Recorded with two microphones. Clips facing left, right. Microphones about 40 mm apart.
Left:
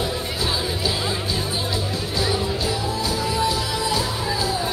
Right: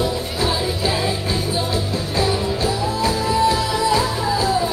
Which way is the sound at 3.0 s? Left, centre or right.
Right.